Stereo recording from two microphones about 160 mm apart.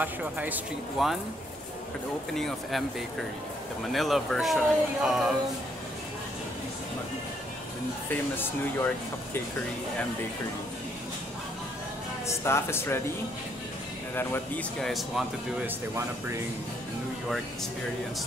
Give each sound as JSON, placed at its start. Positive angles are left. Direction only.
{"t": 0.0, "sound": "speech", "side_deg": -10}
{"t": 2.3, "sound": "speech", "side_deg": 0}
{"t": 3.9, "sound": "speech", "side_deg": 0}
{"t": 8.1, "sound": "speech", "side_deg": 10}
{"t": 12.3, "sound": "speech", "side_deg": 15}
{"t": 14.1, "sound": "speech", "side_deg": 15}
{"t": 14.8, "sound": "speech", "side_deg": 0}